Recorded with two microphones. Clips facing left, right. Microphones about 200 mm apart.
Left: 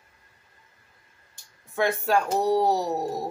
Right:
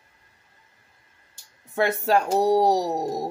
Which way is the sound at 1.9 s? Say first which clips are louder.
Right 2 dB; 40° right (ahead or behind).